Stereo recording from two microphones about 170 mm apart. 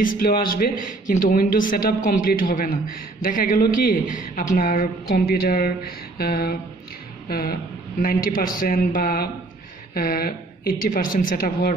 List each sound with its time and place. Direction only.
0.0 s speech: 55° left (ahead or behind)